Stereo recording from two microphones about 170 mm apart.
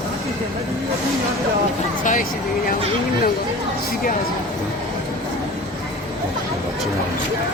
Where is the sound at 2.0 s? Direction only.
50° left (ahead or behind).